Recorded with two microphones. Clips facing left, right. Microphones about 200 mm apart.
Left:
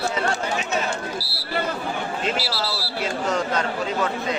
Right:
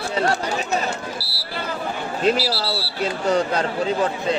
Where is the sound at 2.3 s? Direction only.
35° right (ahead or behind).